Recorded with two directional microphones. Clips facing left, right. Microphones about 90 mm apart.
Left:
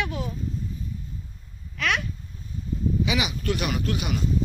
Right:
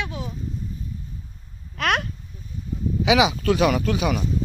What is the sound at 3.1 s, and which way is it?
Speech, 90° right.